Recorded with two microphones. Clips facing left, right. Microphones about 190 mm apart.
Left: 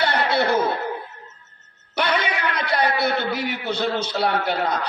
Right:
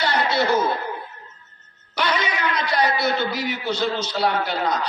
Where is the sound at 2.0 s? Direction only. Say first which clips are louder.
Left 1 dB; 60° left (ahead or behind).